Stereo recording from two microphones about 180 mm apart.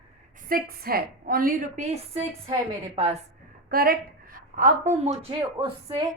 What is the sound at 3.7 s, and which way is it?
A woman's voice, 55° right (ahead or behind).